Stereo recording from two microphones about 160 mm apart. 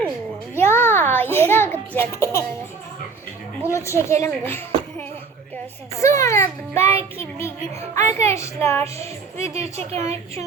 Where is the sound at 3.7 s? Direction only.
20° left (ahead or behind).